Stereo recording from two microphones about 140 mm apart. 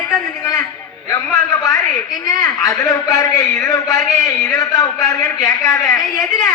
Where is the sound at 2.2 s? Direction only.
25° left (ahead or behind).